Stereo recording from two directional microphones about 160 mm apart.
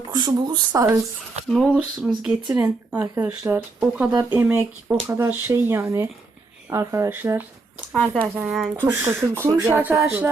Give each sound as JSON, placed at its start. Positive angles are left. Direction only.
{"t": 0.1, "sound": "speech", "side_deg": -25}
{"t": 1.5, "sound": "speech", "side_deg": 0}
{"t": 7.9, "sound": "speech", "side_deg": 0}
{"t": 8.2, "sound": "speech", "side_deg": -10}